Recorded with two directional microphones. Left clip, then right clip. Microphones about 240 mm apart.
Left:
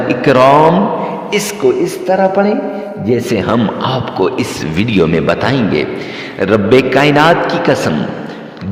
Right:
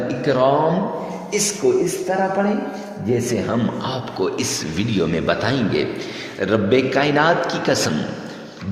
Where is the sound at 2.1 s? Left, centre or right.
Left.